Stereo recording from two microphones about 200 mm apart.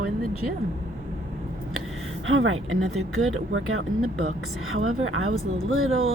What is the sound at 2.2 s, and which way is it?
Speech, 85° right.